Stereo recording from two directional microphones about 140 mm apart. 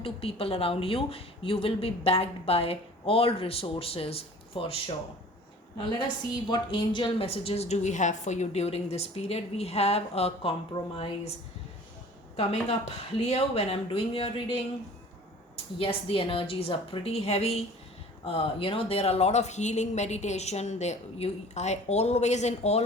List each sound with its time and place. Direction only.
0.0 s a woman's voice: 40° left (ahead or behind)
6.3 s a woman's voice: 35° left (ahead or behind)
12.4 s a woman's voice: 50° left (ahead or behind)